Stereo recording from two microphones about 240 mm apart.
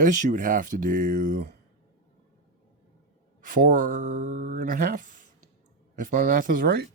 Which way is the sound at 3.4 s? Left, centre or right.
Right.